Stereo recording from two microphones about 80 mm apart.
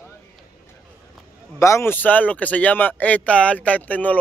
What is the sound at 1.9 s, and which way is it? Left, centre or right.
Speech, left.